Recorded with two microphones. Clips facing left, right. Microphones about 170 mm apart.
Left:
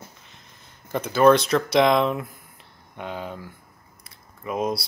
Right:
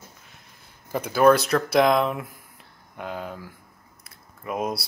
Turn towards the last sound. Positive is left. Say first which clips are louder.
# left 2 dB
turn(degrees=-5)  # may be behind; listen again after turning